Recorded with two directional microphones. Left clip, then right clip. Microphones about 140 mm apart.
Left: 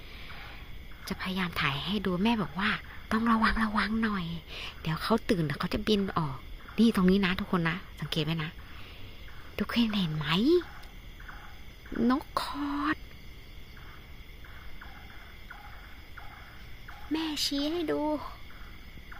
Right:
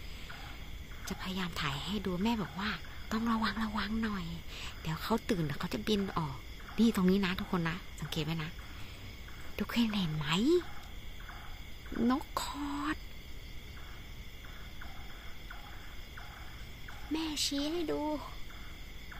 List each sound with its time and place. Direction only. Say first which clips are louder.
1.0 s speech: left 6 dB; 45° left (ahead or behind)
9.6 s speech: left 4 dB; 40° left (ahead or behind)
12.0 s speech: left 4 dB; 40° left (ahead or behind)
17.1 s speech: left 4 dB; 65° left (ahead or behind)